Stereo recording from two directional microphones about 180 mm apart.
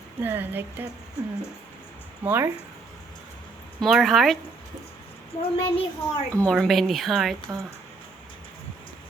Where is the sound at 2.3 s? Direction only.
10° right (ahead or behind).